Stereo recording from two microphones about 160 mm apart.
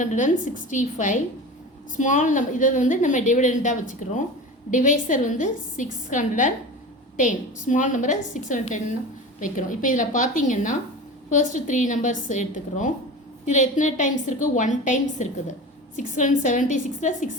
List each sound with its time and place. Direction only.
0.0 s a woman's voice: 50° left (ahead or behind)